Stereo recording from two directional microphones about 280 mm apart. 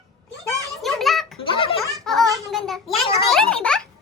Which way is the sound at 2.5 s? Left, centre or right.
Centre.